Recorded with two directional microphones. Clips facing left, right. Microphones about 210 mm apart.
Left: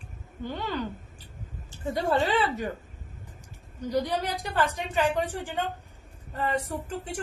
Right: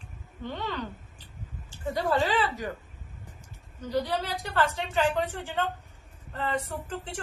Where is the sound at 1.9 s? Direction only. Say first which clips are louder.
Left 1 dB; 25° left (ahead or behind).